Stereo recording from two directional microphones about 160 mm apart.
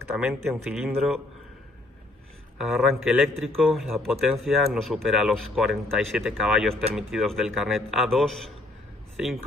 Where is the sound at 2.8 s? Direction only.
Centre (ahead or behind).